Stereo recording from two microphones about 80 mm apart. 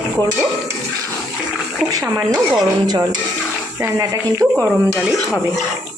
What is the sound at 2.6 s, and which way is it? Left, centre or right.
Speech, right.